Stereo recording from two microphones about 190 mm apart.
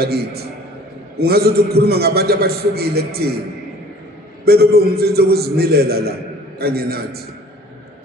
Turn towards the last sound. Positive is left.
turn(degrees=-55)  # may be behind; listen again after turning